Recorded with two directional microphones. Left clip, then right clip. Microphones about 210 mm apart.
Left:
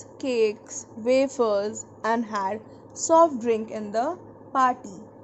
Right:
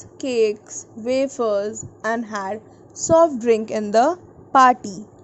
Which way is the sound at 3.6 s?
25° right (ahead or behind).